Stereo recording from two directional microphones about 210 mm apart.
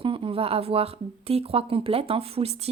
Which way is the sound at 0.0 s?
25° right (ahead or behind).